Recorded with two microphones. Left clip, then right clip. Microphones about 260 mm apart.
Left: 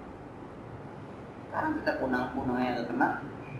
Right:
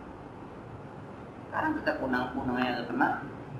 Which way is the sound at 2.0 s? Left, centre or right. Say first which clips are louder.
Even; centre.